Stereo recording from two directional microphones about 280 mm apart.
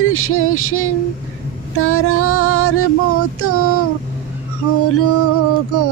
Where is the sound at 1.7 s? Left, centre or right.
Left.